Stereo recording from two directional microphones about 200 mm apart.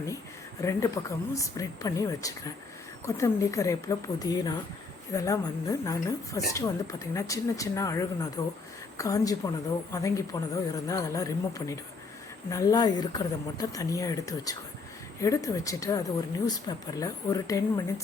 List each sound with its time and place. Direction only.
0.6 s speech: 15° left (ahead or behind)